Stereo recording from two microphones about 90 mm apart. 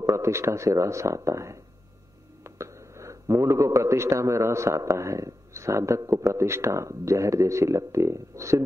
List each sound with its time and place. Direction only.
0.0 s a man's voice: 35° right (ahead or behind)